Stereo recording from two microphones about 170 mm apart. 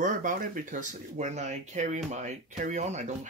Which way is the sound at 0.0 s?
50° right (ahead or behind).